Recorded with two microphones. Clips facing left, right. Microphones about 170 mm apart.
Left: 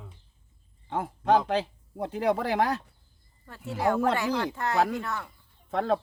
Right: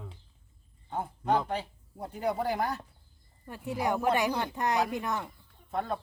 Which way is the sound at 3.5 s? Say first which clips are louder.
Left 3 dB; 15° right (ahead or behind).